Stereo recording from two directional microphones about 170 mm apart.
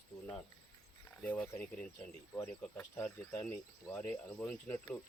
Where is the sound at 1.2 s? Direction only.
10° left (ahead or behind).